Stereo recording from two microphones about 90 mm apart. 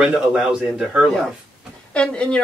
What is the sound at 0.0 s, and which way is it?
A man's voice, 10° right (ahead or behind).